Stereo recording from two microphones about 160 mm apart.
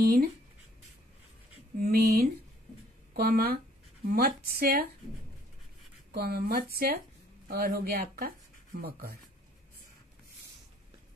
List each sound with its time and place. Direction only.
0.0 s speech: 70° right (ahead or behind)
1.9 s speech: 70° right (ahead or behind)
6.1 s speech: 70° right (ahead or behind)